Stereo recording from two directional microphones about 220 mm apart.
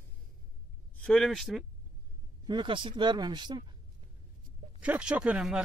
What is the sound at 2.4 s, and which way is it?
Speech, 20° right (ahead or behind).